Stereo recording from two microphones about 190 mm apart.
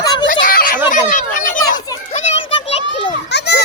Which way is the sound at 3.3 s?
60° left (ahead or behind).